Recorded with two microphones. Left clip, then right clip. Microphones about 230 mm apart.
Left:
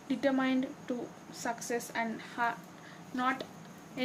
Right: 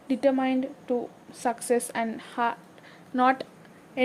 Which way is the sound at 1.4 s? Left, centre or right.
Right.